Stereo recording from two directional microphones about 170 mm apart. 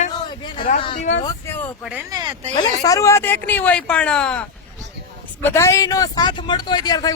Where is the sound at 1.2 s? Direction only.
15° left (ahead or behind).